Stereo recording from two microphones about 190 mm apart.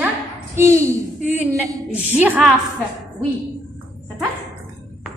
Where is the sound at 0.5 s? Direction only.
15° right (ahead or behind).